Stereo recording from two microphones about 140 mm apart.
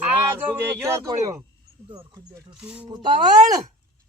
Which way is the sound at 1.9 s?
25° right (ahead or behind).